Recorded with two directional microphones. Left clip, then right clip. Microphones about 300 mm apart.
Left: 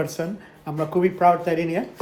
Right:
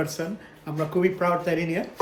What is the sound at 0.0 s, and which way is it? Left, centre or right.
A man's voice, centre.